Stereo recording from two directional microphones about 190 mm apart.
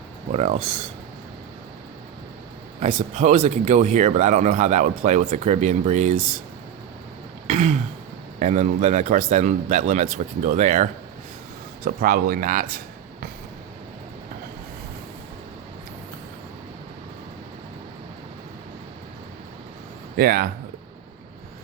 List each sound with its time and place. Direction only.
0.3 s speech: 35° right (ahead or behind)
2.8 s speech: 40° right (ahead or behind)
7.4 s throat clearing: 40° right (ahead or behind)
8.4 s speech: 40° right (ahead or behind)
20.1 s speech: 50° right (ahead or behind)